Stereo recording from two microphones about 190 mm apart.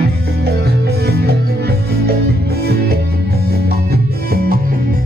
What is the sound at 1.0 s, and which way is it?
Music, 60° right (ahead or behind).